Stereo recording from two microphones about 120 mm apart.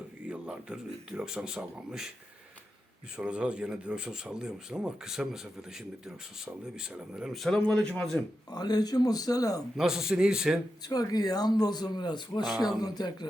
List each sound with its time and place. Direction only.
0.3 s speech: 5° right (ahead or behind)
3.2 s speech: 10° right (ahead or behind)
8.4 s speech: 35° left (ahead or behind)
9.7 s speech: 5° right (ahead or behind)
10.8 s speech: 30° left (ahead or behind)